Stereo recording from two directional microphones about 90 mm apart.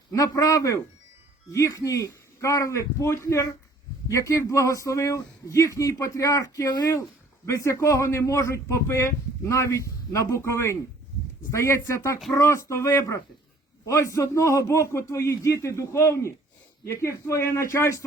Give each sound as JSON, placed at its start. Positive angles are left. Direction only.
{"t": 0.1, "sound": "speech", "side_deg": 40}
{"t": 7.4, "sound": "speech", "side_deg": 35}